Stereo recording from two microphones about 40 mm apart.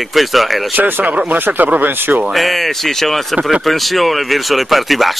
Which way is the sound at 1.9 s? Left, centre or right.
Right.